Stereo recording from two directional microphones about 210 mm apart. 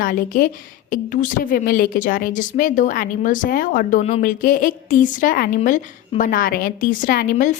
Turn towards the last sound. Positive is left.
turn(degrees=35)  # may be behind; listen again after turning